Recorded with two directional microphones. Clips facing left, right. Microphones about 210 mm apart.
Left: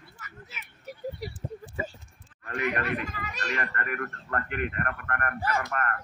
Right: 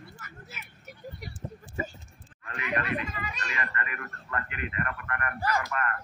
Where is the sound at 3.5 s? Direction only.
50° left (ahead or behind).